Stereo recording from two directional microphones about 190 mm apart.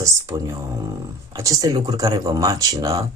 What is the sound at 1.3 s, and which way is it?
Speech, 15° right (ahead or behind).